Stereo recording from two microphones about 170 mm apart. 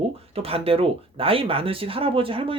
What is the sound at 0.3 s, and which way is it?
Speech, 35° right (ahead or behind).